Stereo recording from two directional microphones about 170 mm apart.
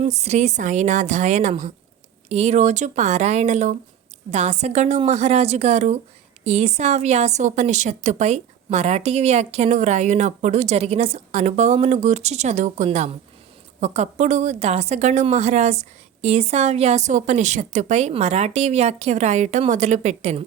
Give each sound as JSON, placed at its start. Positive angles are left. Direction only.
{"t": 0.0, "sound": "a woman's voice", "side_deg": -40}